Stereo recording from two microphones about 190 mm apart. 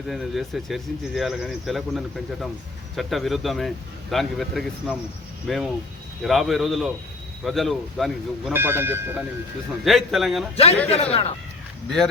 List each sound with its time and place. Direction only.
0.1 s speech: centre (ahead or behind)
8.5 s speech: 10° right (ahead or behind)
9.8 s speech: centre (ahead or behind)
10.8 s a man's voice: 35° left (ahead or behind)